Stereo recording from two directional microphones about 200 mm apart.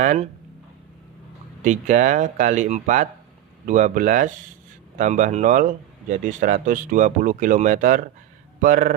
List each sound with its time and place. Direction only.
0.0 s speech: 40° right (ahead or behind)
1.6 s speech: 40° right (ahead or behind)